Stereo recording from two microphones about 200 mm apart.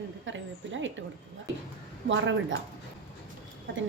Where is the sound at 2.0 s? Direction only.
65° right (ahead or behind).